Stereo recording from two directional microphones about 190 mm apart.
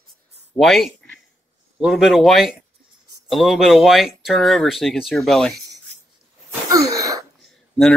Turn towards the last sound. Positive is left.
turn(degrees=0)  # may be behind; listen again after turning